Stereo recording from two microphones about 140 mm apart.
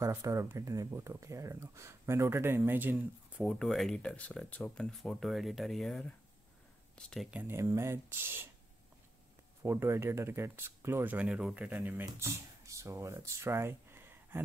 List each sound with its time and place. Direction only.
0.0 s speech: 20° right (ahead or behind)
3.4 s speech: centre (ahead or behind)
7.2 s speech: 15° right (ahead or behind)
9.6 s speech: 20° right (ahead or behind)